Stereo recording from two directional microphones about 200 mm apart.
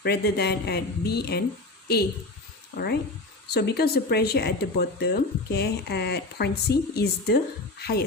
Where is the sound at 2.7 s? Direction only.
50° left (ahead or behind).